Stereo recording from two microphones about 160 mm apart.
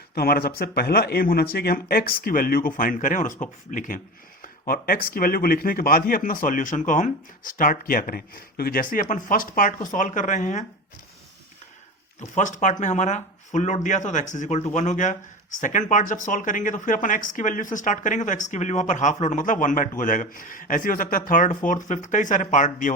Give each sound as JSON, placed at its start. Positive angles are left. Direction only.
{"t": 0.2, "sound": "speech", "side_deg": 75}
{"t": 4.6, "sound": "speech", "side_deg": 65}
{"t": 12.4, "sound": "speech", "side_deg": 50}